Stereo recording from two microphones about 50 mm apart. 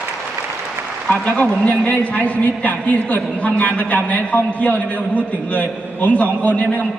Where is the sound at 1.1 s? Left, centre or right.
Left.